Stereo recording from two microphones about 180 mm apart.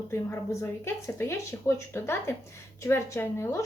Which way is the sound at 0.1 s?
15° left (ahead or behind).